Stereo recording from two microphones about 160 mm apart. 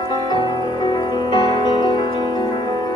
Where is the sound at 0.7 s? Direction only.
25° left (ahead or behind).